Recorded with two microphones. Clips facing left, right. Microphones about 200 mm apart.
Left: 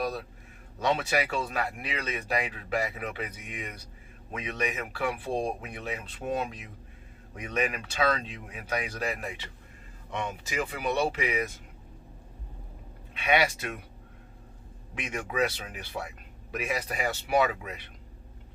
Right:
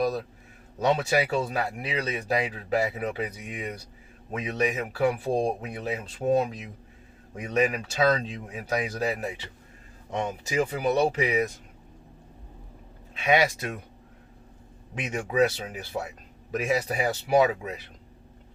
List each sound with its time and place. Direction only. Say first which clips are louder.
0.8 s speech: right 4 dB; 40° right (ahead or behind)
13.2 s speech: right 3 dB; 45° right (ahead or behind)
15.0 s speech: right 5 dB; 35° right (ahead or behind)